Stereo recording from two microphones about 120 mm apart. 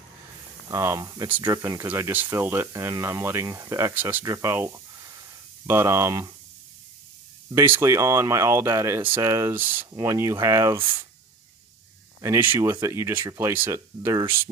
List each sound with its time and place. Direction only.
0.7 s speech: 25° right (ahead or behind)
7.4 s speech: 20° right (ahead or behind)
12.2 s speech: 20° right (ahead or behind)